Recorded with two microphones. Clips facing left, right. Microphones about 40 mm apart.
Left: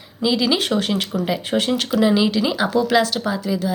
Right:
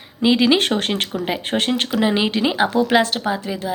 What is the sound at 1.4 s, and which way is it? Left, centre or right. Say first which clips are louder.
Speech: even; right.